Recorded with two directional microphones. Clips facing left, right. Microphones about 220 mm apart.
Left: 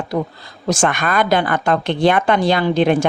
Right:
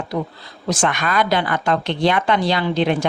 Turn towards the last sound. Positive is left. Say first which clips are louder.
# left 4 dB
turn(degrees=50)  # may be behind; listen again after turning